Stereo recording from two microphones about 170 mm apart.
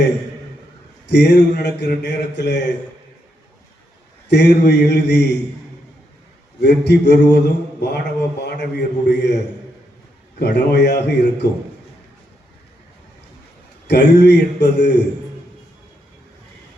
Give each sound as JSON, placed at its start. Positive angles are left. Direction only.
{"t": 1.0, "sound": "speech", "side_deg": 90}
{"t": 4.3, "sound": "a man's voice", "side_deg": 85}
{"t": 6.6, "sound": "a man's voice", "side_deg": 85}
{"t": 10.4, "sound": "a man's voice", "side_deg": 80}
{"t": 13.8, "sound": "a man's voice", "side_deg": 80}